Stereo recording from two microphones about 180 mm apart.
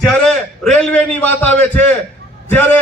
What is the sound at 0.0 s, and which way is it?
A man's voice, 5° left (ahead or behind).